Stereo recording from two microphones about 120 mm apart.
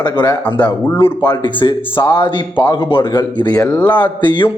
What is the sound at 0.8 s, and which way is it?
Speech, 20° left (ahead or behind).